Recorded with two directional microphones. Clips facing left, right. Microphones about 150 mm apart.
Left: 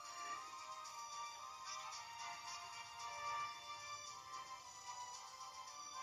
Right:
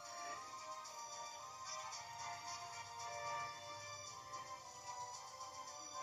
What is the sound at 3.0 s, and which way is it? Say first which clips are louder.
Music: right 2 dB; 40° right (ahead or behind).